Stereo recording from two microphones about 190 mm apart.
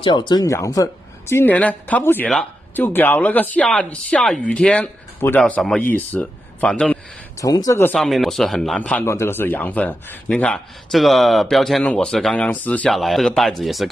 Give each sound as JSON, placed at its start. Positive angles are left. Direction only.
{"t": 0.0, "sound": "speech", "side_deg": 25}
{"t": 7.3, "sound": "speech", "side_deg": 20}
{"t": 7.9, "sound": "speech", "side_deg": 0}